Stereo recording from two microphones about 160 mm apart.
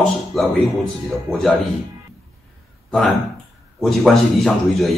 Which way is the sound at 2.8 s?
5° left (ahead or behind).